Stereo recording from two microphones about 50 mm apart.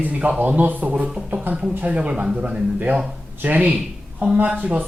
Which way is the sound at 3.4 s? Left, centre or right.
Right.